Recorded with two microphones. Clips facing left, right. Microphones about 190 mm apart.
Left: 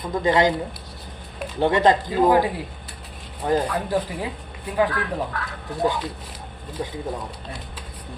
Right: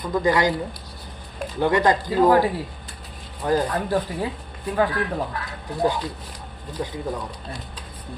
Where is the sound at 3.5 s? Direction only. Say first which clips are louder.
Even; 15° left (ahead or behind).